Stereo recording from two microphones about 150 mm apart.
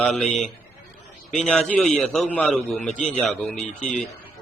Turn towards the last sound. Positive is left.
turn(degrees=5)  # may be behind; listen again after turning